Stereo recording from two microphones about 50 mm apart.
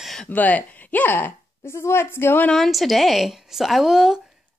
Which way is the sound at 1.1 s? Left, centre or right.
Left.